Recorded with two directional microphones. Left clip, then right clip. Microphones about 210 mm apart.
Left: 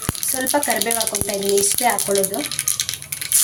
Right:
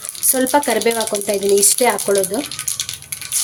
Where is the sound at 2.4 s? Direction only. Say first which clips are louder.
Even; centre (ahead or behind).